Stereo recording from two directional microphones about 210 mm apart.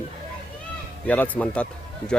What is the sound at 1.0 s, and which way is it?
Speech, 10° left (ahead or behind).